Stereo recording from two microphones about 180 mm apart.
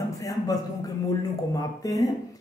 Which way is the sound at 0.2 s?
20° left (ahead or behind).